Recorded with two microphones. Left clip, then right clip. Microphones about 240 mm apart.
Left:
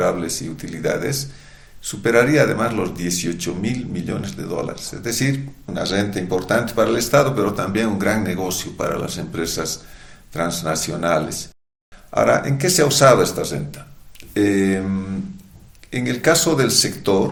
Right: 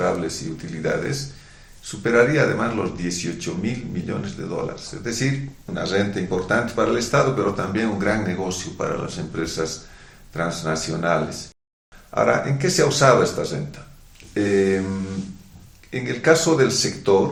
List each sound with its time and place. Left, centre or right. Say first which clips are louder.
0.0 s speech: left 2 dB; left
15.9 s speech: even; left